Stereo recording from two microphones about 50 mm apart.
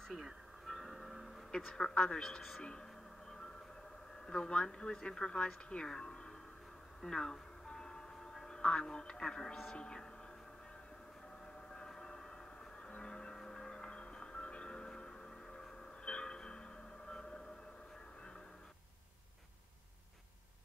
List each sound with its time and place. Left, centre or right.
0.1 s music: centre
1.5 s speech: centre
4.3 s speech: centre
7.0 s music: centre
9.8 s speech: centre
11.7 s a sound: centre
12.8 s music: centre